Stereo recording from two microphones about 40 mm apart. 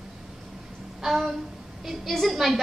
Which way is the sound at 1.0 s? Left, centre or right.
Centre.